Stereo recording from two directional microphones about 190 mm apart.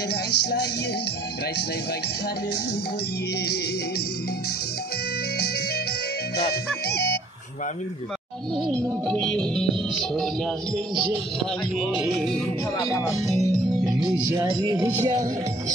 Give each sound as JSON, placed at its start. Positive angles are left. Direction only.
{"t": 0.1, "sound": "speech", "side_deg": 60}
{"t": 6.3, "sound": "music", "side_deg": 55}
{"t": 9.0, "sound": "music", "side_deg": 5}
{"t": 12.8, "sound": "speech", "side_deg": 15}
{"t": 14.0, "sound": "speech", "side_deg": -15}